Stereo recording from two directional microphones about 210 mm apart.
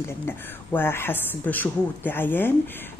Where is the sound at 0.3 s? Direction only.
10° left (ahead or behind).